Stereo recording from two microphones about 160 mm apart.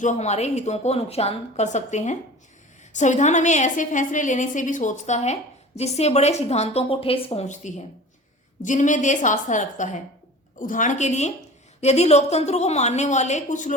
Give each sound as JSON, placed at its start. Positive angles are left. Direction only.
{"t": 0.0, "sound": "a woman's voice", "side_deg": 45}